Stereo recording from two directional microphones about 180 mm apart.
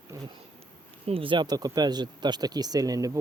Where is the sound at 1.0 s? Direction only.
30° right (ahead or behind).